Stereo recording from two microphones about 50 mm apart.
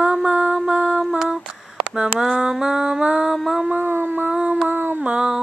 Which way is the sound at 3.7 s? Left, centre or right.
Right.